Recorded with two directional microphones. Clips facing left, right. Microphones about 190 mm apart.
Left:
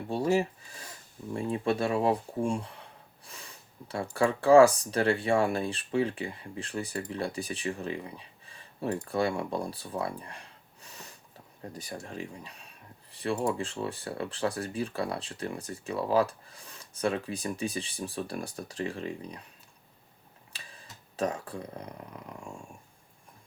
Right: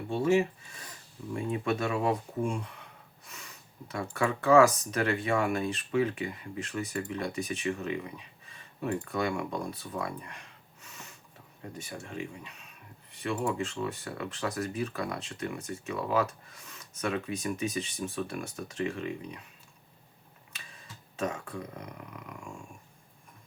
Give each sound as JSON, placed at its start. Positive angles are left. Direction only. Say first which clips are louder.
{"t": 0.1, "sound": "speech", "louder": "right 1 dB", "side_deg": 35}
{"t": 20.5, "sound": "speech", "louder": "even", "side_deg": 35}